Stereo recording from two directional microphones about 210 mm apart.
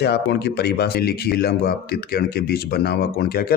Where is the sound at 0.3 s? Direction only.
50° left (ahead or behind).